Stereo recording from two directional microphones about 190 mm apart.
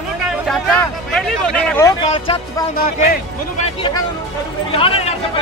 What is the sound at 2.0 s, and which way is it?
Speech, 35° left (ahead or behind).